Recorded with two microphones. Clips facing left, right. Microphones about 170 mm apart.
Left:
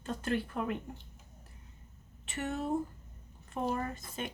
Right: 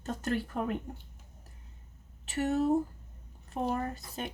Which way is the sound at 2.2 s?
40° right (ahead or behind).